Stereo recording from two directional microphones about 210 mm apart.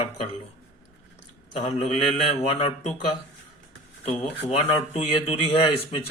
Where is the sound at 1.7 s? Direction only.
30° left (ahead or behind).